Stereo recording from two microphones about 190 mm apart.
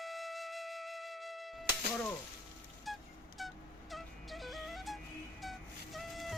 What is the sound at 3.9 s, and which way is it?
Music, centre (ahead or behind).